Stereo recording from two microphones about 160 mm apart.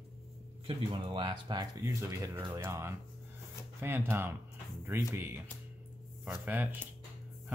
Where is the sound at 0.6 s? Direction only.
30° right (ahead or behind); by 5.1 s 15° right (ahead or behind).